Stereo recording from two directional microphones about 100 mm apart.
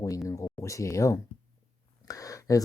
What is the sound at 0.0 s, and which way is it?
Speech, 35° left (ahead or behind).